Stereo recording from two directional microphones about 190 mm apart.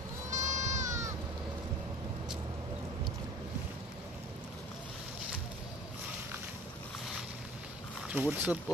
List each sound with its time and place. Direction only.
0.3 s goat: 40° right (ahead or behind)
0.8 s bleat: 15° right (ahead or behind)
8.1 s speech: 10° right (ahead or behind)